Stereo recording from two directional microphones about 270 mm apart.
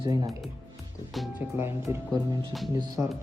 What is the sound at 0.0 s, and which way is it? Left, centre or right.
Speech, centre.